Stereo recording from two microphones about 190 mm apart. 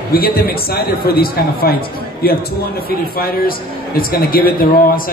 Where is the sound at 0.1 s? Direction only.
55° left (ahead or behind).